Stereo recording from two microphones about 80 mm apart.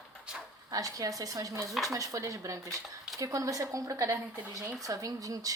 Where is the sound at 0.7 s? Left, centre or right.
Right.